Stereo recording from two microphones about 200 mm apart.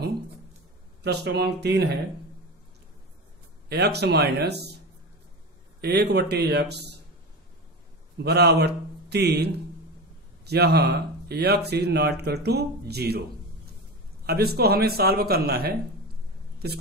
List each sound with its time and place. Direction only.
1.0 s speech: 55° right (ahead or behind)
3.6 s speech: 55° right (ahead or behind)
5.8 s speech: 55° right (ahead or behind)
8.2 s a man's voice: 55° right (ahead or behind)
14.2 s a man's voice: 50° right (ahead or behind)